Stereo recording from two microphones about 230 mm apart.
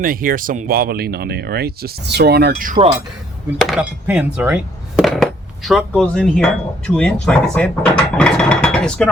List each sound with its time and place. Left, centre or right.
0.0 s speech: right
3.6 s speech: centre